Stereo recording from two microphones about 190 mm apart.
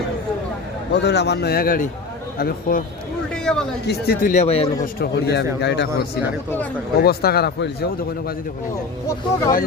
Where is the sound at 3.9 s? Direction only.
55° left (ahead or behind).